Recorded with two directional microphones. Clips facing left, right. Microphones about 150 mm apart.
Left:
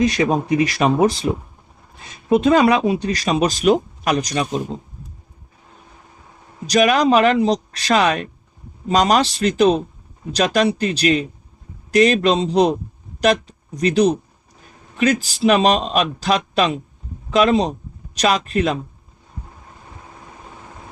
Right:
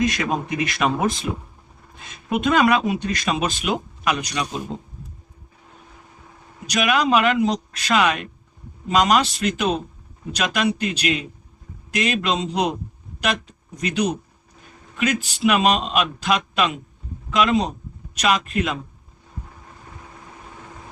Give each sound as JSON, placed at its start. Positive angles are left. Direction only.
{"t": 0.0, "sound": "speech", "side_deg": 30}
{"t": 2.3, "sound": "speech", "side_deg": 30}
{"t": 6.7, "sound": "speech", "side_deg": 40}